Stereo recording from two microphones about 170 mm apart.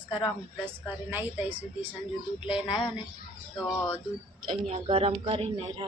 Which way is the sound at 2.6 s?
30° left (ahead or behind).